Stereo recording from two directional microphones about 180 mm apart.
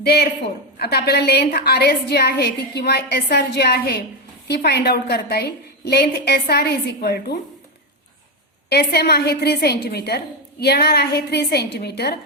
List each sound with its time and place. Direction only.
0.0 s a woman's voice: 60° left (ahead or behind)
8.7 s a woman's voice: 65° left (ahead or behind)